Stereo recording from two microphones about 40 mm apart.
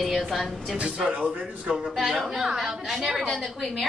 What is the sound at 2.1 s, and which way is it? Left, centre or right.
A woman's voice, centre.